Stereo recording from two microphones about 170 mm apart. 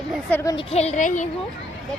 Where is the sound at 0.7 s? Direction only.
40° left (ahead or behind).